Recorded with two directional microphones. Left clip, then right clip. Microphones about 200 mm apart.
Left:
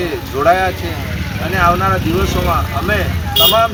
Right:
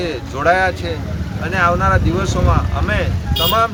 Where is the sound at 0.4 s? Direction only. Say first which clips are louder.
Left 1 dB; 15° right (ahead or behind).